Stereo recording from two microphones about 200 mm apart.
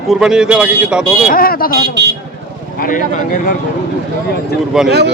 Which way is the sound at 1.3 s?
45° left (ahead or behind).